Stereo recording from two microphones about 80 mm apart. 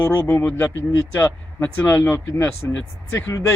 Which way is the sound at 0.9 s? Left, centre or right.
Left.